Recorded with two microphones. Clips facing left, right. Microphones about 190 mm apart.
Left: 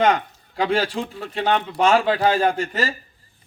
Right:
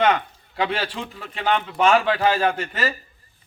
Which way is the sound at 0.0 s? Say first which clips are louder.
Left 1 dB; 40° left (ahead or behind).